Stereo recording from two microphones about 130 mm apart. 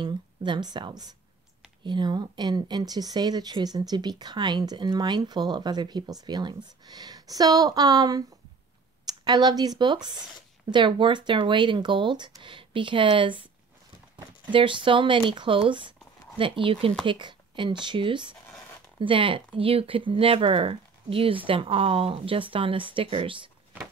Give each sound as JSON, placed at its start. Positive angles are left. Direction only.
{"t": 0.0, "sound": "a woman's voice", "side_deg": -35}
{"t": 14.5, "sound": "speech", "side_deg": -40}